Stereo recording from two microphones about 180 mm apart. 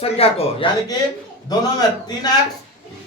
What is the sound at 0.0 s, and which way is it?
Speech, 35° left (ahead or behind).